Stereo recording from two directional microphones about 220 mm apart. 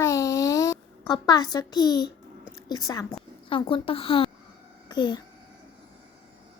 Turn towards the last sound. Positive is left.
turn(degrees=20)  # may be behind; listen again after turning